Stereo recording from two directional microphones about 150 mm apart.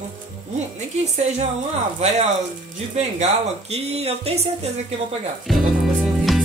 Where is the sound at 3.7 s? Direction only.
45° right (ahead or behind).